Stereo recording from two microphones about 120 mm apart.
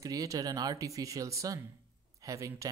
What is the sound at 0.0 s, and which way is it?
Speech, 30° right (ahead or behind).